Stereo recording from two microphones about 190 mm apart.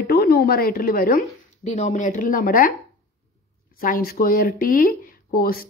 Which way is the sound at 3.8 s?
50° left (ahead or behind).